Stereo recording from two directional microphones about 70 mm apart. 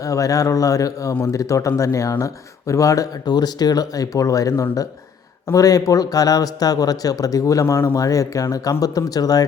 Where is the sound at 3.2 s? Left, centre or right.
Left.